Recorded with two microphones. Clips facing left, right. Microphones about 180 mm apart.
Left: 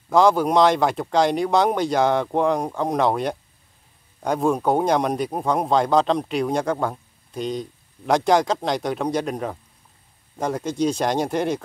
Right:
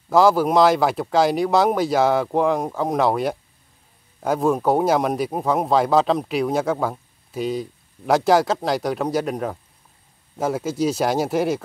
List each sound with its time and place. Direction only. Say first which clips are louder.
0.1 s speech: right 1 dB; 5° right (ahead or behind)